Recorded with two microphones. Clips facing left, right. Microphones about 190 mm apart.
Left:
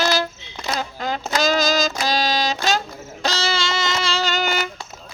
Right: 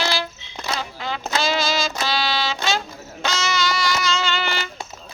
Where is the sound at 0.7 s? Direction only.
45° left (ahead or behind).